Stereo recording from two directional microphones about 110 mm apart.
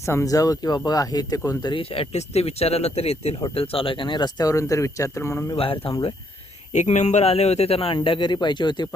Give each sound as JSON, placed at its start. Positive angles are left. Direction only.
{"t": 0.0, "sound": "speech", "side_deg": 25}
{"t": 1.8, "sound": "speech", "side_deg": 60}
{"t": 3.5, "sound": "speech", "side_deg": 60}
{"t": 5.5, "sound": "speech", "side_deg": 55}
{"t": 6.7, "sound": "speech", "side_deg": 90}